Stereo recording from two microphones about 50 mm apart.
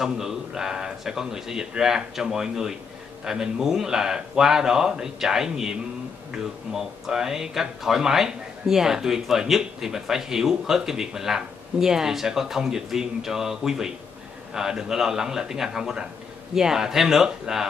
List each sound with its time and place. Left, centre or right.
0.0 s speech: centre